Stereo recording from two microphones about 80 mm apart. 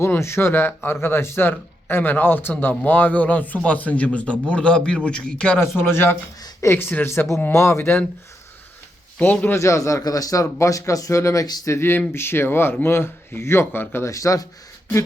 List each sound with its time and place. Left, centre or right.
0.0 s speech: left; by 5.5 s centre
5.5 s speech: left
9.1 s speech: centre
9.6 s speech: left
14.1 s speech: left